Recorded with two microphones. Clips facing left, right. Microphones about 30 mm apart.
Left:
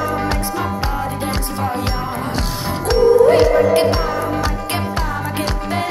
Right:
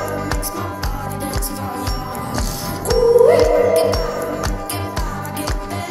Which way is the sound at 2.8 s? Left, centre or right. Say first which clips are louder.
Even; left.